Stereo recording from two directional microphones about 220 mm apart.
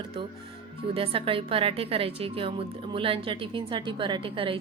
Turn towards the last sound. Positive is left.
turn(degrees=-25)  # may be behind; listen again after turning